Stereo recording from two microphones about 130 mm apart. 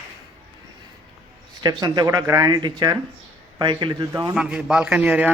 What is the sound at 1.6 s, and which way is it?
Speech, 35° right (ahead or behind).